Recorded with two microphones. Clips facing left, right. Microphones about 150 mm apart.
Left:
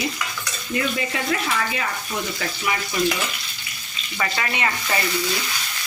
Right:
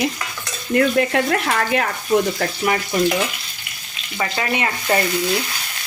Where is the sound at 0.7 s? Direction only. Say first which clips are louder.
Right 9 dB; 60° right (ahead or behind).